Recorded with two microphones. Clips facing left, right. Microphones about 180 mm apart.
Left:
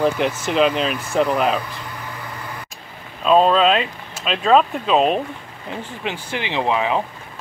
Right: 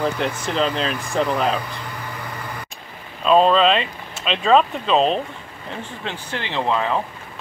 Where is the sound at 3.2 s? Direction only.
Centre (ahead or behind).